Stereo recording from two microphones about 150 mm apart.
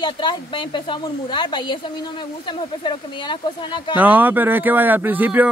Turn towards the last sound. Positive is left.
turn(degrees=-10)  # may be behind; listen again after turning